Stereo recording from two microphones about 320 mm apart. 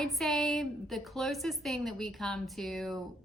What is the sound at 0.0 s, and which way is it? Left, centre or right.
A woman's voice, centre.